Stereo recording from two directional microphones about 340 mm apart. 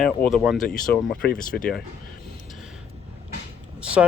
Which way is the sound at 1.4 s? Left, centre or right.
Left.